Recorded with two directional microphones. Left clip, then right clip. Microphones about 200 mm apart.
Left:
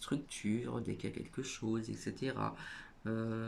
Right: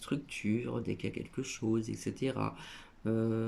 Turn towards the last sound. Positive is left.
turn(degrees=-15)  # may be behind; listen again after turning